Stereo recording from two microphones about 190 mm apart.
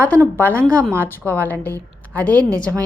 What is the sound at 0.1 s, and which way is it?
Speech, 10° left (ahead or behind).